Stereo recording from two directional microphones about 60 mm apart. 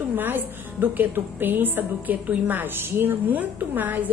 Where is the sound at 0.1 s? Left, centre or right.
Right.